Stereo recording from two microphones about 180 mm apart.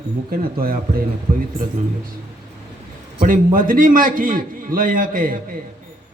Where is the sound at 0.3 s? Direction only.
55° right (ahead or behind).